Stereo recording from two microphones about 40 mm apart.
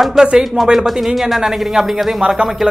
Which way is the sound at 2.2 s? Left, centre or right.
Right.